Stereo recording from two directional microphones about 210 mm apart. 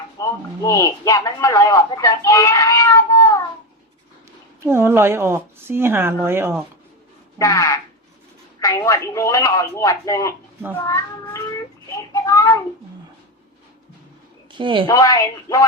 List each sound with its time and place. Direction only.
0.2 s speech: 15° left (ahead or behind)
4.6 s a woman's voice: 10° right (ahead or behind)
7.3 s speech: 15° left (ahead or behind)
14.5 s a woman's voice: 25° right (ahead or behind)
14.8 s speech: 15° left (ahead or behind)